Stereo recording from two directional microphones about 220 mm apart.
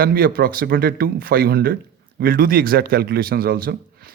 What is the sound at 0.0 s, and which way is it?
Speech, 45° right (ahead or behind).